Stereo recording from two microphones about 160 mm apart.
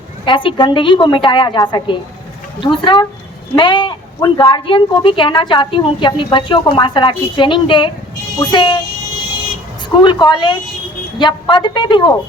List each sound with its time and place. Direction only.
0.3 s a woman's voice: 30° left (ahead or behind)
10.0 s a woman's voice: 30° left (ahead or behind)